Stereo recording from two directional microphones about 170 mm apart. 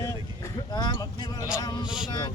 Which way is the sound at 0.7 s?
25° left (ahead or behind).